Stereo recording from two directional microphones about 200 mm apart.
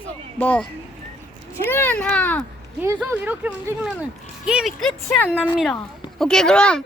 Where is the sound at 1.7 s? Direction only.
10° left (ahead or behind).